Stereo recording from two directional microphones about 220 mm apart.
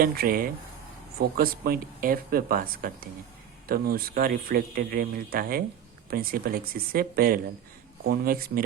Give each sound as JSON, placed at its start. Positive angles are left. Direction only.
{"t": 0.0, "sound": "speech", "side_deg": -40}